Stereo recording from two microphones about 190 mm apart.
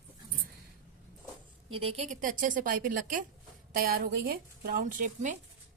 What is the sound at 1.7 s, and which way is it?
A woman's voice, 30° right (ahead or behind).